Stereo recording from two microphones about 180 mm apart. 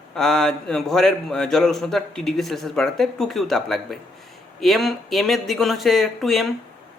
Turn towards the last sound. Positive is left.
turn(degrees=0)  # may be behind; listen again after turning